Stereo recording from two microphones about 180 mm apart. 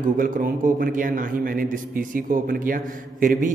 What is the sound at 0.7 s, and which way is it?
A man's voice, 50° right (ahead or behind).